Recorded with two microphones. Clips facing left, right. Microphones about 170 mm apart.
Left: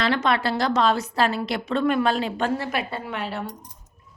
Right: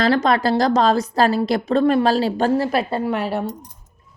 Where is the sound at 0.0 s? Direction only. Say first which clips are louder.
Right 5 dB; 40° right (ahead or behind).